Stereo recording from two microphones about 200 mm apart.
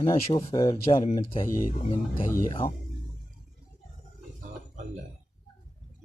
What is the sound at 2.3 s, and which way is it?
Speech, 20° left (ahead or behind).